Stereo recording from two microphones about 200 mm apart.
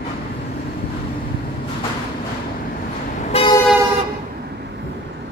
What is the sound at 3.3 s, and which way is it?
Vehicle, 30° left (ahead or behind).